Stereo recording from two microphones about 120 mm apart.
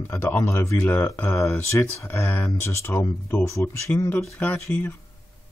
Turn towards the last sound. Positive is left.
turn(degrees=15)  # may be behind; listen again after turning